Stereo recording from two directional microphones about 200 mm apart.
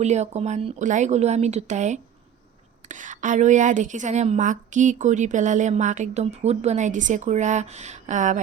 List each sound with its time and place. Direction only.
0.0 s a woman's voice: 35° right (ahead or behind)